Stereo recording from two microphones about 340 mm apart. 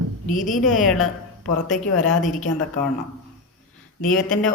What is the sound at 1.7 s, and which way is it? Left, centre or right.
Music, left.